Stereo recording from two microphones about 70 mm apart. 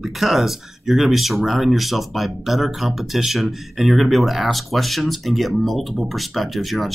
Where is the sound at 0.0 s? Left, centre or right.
Centre.